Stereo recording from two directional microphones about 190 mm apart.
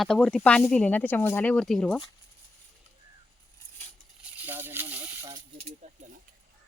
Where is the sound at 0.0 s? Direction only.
5° left (ahead or behind).